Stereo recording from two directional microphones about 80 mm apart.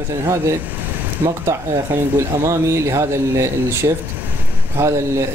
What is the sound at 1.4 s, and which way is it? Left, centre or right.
Speech, right.